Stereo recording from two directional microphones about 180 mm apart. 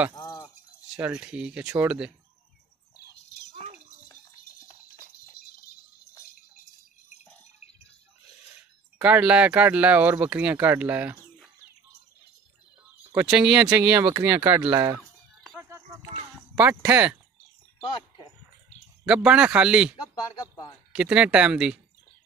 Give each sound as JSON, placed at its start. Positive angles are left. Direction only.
{"t": 0.2, "sound": "a sound", "side_deg": 20}
{"t": 0.8, "sound": "speech", "side_deg": -5}
{"t": 8.9, "sound": "speech", "side_deg": -10}
{"t": 13.1, "sound": "speech", "side_deg": -5}
{"t": 15.0, "sound": "music", "side_deg": 0}
{"t": 16.5, "sound": "speech", "side_deg": -10}
{"t": 17.7, "sound": "a sound", "side_deg": 25}
{"t": 19.0, "sound": "speech", "side_deg": -5}